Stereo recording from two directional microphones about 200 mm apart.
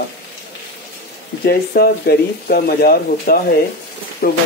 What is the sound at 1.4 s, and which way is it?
Speech, 50° left (ahead or behind).